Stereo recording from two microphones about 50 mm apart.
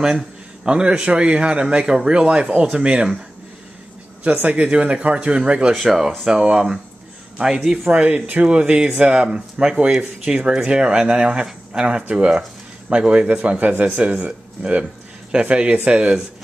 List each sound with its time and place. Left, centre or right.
0.7 s speech: centre
4.2 s speech: right
5.8 s speech: centre
6.2 s speech: centre
7.9 s speech: right